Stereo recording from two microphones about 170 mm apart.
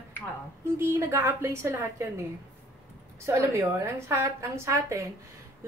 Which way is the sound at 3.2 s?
15° right (ahead or behind).